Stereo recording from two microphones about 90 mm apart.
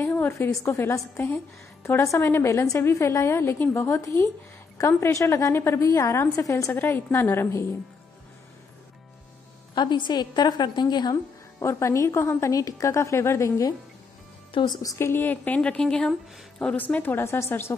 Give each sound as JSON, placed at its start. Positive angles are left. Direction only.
{"t": 0.0, "sound": "a sound", "side_deg": 30}
{"t": 0.5, "sound": "a woman's voice", "side_deg": 35}
{"t": 9.8, "sound": "a woman's voice", "side_deg": 55}
{"t": 11.6, "sound": "a woman's voice", "side_deg": 30}
{"t": 15.0, "sound": "a woman's voice", "side_deg": 25}